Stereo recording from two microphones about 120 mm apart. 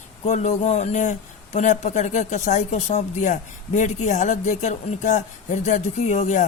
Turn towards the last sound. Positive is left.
turn(degrees=85)